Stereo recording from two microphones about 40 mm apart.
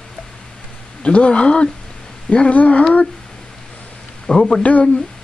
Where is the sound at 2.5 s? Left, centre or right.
Left.